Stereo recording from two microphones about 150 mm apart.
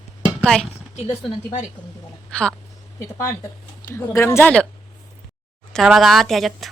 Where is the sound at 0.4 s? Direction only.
5° left (ahead or behind).